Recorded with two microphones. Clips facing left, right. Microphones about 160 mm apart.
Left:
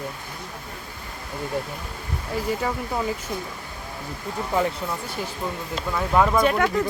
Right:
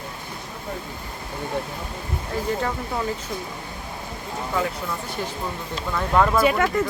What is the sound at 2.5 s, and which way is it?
Speech, 5° left (ahead or behind).